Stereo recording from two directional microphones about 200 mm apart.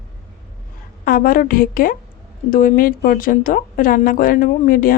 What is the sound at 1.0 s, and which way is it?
A woman's voice, 45° left (ahead or behind).